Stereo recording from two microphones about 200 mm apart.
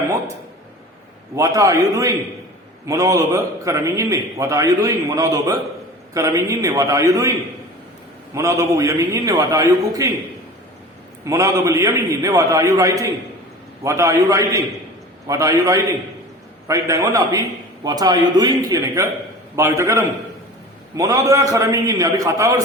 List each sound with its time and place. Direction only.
1.4 s a man's voice: 15° right (ahead or behind)
8.4 s a man's voice: 15° right (ahead or behind)
11.3 s a man's voice: 15° right (ahead or behind)